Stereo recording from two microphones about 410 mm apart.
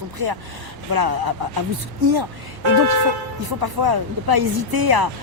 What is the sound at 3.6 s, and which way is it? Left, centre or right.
Speech, right.